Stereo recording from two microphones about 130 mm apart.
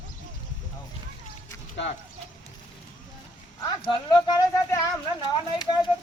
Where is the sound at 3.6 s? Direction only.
35° left (ahead or behind).